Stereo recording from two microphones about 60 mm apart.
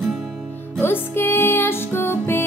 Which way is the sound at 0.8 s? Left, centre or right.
Left.